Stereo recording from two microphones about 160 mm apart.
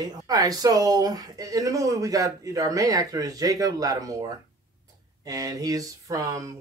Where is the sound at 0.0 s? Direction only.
25° right (ahead or behind).